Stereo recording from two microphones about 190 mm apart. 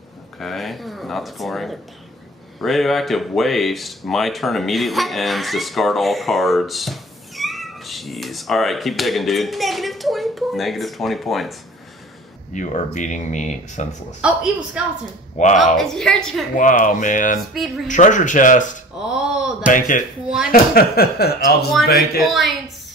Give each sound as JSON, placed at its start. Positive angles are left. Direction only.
{"t": 0.4, "sound": "speech", "side_deg": 0}
{"t": 12.5, "sound": "speech", "side_deg": 40}
{"t": 14.2, "sound": "speech", "side_deg": -5}
{"t": 15.4, "sound": "speech", "side_deg": 40}
{"t": 15.8, "sound": "speech", "side_deg": 0}
{"t": 16.5, "sound": "speech", "side_deg": 45}
{"t": 18.9, "sound": "a sound", "side_deg": -5}
{"t": 20.4, "sound": "speech", "side_deg": 50}
{"t": 22.2, "sound": "speech", "side_deg": 0}